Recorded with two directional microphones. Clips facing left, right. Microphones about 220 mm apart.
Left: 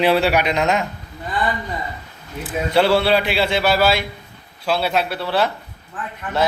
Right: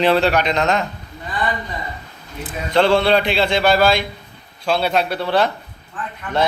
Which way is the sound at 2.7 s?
5° left (ahead or behind).